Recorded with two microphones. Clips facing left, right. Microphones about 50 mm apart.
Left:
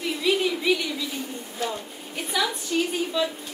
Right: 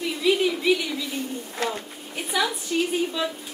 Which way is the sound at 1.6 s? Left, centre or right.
Right.